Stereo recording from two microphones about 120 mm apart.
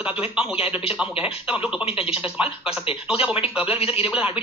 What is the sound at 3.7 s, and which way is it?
Speech, 50° left (ahead or behind).